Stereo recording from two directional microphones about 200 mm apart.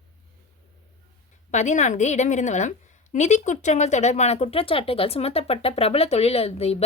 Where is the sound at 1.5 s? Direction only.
35° left (ahead or behind).